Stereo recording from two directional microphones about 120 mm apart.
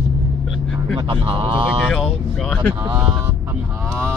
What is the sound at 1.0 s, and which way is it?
Speech, 45° right (ahead or behind).